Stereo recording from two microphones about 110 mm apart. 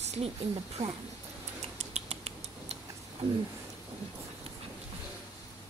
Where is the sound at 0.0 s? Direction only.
80° right.